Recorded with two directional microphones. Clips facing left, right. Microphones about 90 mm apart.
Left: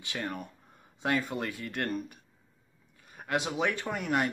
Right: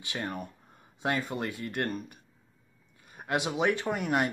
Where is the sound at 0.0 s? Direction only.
5° right (ahead or behind).